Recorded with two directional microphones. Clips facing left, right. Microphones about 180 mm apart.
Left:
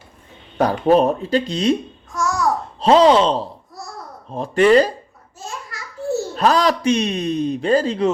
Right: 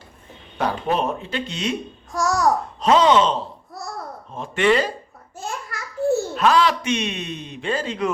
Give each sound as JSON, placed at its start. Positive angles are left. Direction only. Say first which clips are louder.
{"t": 0.6, "sound": "speech", "louder": "left 8 dB", "side_deg": 40}
{"t": 2.1, "sound": "a sound", "louder": "right 1 dB", "side_deg": -40}
{"t": 2.8, "sound": "speech", "louder": "left 4 dB", "side_deg": 35}
{"t": 6.3, "sound": "speech", "louder": "left 1 dB", "side_deg": 40}